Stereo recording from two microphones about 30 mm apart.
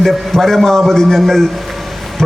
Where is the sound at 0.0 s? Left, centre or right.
Centre.